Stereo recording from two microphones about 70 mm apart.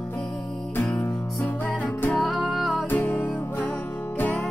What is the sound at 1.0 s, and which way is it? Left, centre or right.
Music, left.